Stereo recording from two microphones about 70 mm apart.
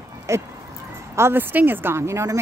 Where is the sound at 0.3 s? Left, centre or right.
Right.